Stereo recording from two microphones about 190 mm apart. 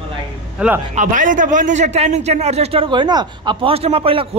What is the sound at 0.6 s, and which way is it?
Speech, 5° right (ahead or behind).